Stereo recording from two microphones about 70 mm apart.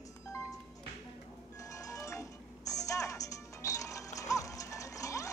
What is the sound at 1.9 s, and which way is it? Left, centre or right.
Music, left.